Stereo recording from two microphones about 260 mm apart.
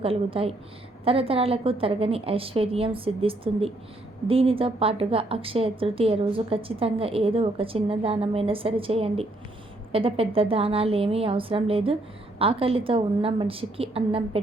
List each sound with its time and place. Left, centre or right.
0.0 s a woman's voice: right